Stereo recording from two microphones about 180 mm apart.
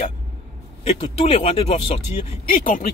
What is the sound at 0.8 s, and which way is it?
Speech, 35° left (ahead or behind).